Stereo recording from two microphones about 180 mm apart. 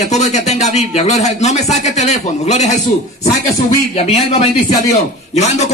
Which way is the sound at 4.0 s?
35° left (ahead or behind).